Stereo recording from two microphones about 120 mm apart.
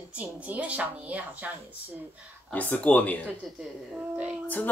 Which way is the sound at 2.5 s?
15° left (ahead or behind).